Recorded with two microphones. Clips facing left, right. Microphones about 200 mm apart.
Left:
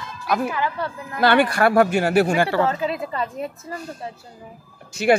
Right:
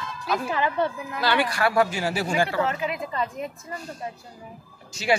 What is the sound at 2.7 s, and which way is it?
Speech, 30° left (ahead or behind).